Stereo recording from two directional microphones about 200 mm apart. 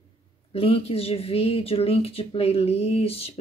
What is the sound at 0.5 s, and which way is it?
Speech, 30° left (ahead or behind).